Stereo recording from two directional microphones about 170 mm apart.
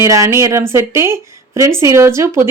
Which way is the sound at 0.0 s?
15° right (ahead or behind).